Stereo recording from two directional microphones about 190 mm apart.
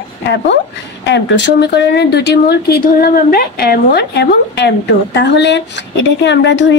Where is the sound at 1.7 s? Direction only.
60° left (ahead or behind).